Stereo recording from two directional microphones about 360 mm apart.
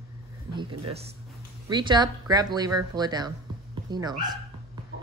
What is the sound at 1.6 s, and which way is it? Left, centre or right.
Speech, centre.